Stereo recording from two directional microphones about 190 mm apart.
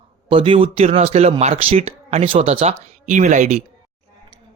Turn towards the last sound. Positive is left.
turn(degrees=-40)  # may be behind; listen again after turning